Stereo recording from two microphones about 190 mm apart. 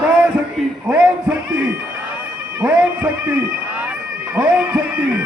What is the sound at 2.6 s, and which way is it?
Speech, 5° right (ahead or behind).